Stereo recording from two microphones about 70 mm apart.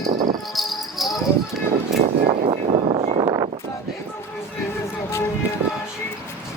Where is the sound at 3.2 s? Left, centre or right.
Right.